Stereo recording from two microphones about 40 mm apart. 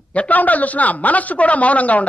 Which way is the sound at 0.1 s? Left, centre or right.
Left.